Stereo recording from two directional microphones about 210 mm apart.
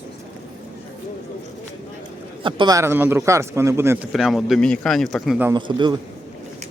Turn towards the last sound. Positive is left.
turn(degrees=-20)  # may be behind; listen again after turning